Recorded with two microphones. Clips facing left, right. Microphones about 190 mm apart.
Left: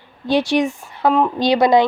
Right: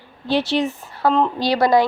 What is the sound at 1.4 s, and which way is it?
Speech, 20° left (ahead or behind).